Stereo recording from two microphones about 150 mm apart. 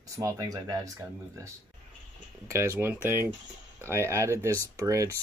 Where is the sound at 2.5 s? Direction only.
20° right (ahead or behind).